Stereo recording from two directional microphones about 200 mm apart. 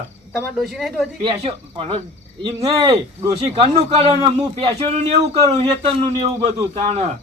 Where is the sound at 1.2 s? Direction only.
25° right (ahead or behind).